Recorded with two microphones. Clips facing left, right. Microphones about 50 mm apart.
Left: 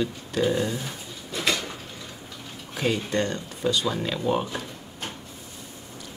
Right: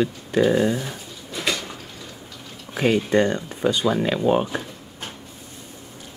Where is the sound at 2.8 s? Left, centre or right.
Right.